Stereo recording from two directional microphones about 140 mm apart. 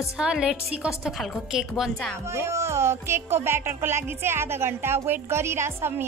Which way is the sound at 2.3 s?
20° right (ahead or behind).